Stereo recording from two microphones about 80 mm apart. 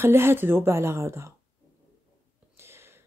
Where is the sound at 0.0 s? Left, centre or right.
Right.